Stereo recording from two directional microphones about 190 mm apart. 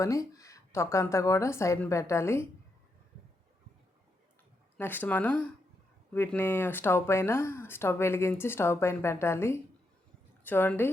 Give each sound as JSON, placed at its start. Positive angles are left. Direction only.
{"t": 0.0, "sound": "speech", "side_deg": 15}
{"t": 4.8, "sound": "speech", "side_deg": 10}